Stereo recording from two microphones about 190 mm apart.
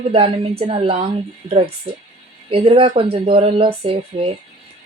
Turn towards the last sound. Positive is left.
turn(degrees=-30)  # may be behind; listen again after turning